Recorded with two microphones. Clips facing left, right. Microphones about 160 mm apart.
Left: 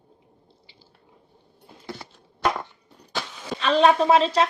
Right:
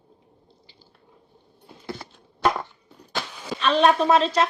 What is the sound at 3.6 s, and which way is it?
Speech, 30° left (ahead or behind).